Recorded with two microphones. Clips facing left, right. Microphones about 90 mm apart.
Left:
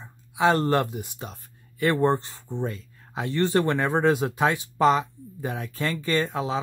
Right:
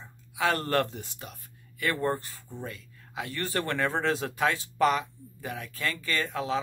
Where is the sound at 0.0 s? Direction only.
25° left (ahead or behind).